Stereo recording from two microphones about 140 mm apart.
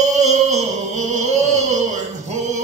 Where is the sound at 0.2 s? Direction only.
55° right (ahead or behind).